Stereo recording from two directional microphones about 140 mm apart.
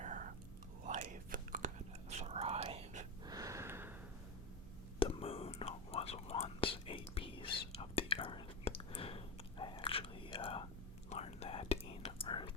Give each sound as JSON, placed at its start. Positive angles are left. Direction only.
{"t": 0.0, "sound": "whispering", "side_deg": -65}
{"t": 3.2, "sound": "snort", "side_deg": -25}
{"t": 4.9, "sound": "whispering", "side_deg": 45}